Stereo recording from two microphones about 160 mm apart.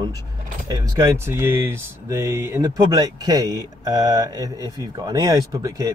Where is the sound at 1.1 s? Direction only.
15° right (ahead or behind).